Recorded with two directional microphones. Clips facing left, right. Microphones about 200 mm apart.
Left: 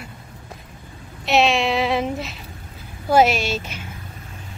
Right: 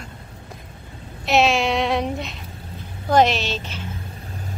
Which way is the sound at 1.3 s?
Centre (ahead or behind).